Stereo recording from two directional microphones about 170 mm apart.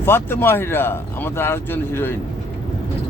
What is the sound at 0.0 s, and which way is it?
Speech, 15° left (ahead or behind).